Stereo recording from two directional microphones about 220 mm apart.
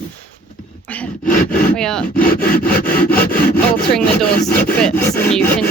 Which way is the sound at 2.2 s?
40° left (ahead or behind).